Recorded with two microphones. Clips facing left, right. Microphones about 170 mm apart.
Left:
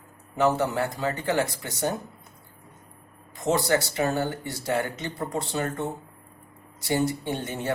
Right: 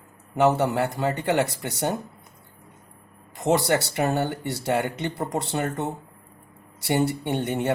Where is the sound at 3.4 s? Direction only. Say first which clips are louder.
Right 2 dB; 60° right (ahead or behind).